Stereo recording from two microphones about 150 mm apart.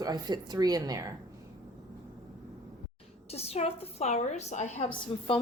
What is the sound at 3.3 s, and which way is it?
Speech, 45° left (ahead or behind).